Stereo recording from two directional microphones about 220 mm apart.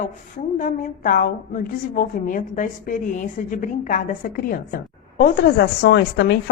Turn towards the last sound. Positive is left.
turn(degrees=50)  # may be behind; listen again after turning